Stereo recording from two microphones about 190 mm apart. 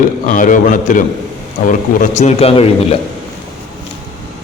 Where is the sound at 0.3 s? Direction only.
45° left (ahead or behind).